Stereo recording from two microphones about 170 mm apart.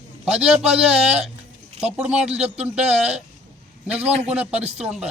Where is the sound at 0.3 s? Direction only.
5° right (ahead or behind).